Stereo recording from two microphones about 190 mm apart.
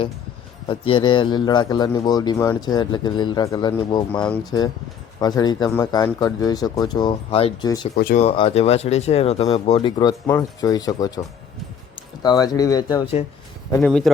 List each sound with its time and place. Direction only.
0.7 s speech: 25° left (ahead or behind)
7.9 s speech: 50° left (ahead or behind)
8.2 s speech: 30° left (ahead or behind)
12.2 s speech: 20° left (ahead or behind)
13.8 s speech: centre (ahead or behind)